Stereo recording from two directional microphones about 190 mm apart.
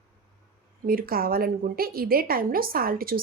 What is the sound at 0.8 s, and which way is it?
Speech, 50° right (ahead or behind).